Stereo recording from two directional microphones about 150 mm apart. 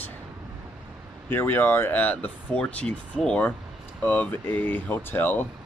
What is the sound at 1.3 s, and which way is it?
Speech, 15° left (ahead or behind).